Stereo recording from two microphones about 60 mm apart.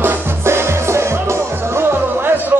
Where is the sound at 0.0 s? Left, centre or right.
Right.